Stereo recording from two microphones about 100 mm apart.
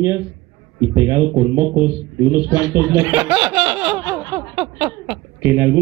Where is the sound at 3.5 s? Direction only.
15° right (ahead or behind).